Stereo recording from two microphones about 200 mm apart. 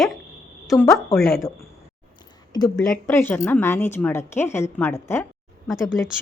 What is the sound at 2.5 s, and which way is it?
Speech, 20° left (ahead or behind).